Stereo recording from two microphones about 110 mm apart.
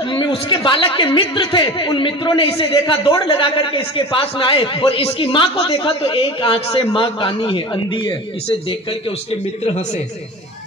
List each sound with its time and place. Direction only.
0.1 s a woman's voice: 45° left (ahead or behind)